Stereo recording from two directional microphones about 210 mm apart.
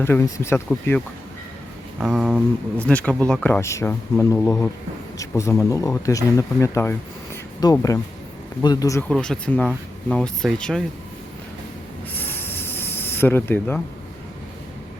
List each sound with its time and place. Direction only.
0.0 s speech: 10° left (ahead or behind)
2.0 s speech: centre (ahead or behind)
12.1 s snake: 10° left (ahead or behind)